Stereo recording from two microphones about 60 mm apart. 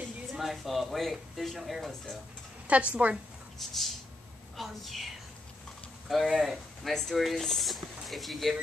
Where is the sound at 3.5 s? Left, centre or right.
Centre.